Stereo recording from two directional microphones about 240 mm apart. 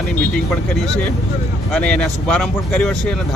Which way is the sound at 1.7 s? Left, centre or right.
Centre.